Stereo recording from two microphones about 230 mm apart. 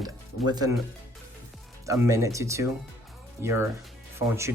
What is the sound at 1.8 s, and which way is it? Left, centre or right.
Speech, centre.